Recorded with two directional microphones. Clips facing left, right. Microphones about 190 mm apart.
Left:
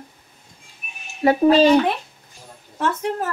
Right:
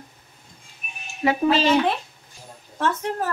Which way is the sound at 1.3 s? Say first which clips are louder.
Left 6 dB; 40° left (ahead or behind).